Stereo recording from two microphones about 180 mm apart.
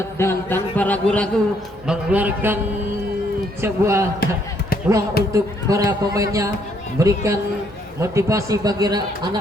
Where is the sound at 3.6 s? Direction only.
15° right (ahead or behind).